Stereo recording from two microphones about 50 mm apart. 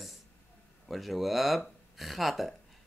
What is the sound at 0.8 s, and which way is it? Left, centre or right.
Speech, centre.